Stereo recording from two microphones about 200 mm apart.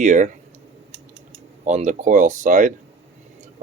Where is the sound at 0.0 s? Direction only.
40° right (ahead or behind).